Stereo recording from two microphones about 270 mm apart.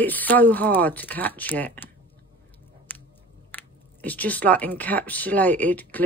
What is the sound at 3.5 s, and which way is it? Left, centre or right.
Speech, centre.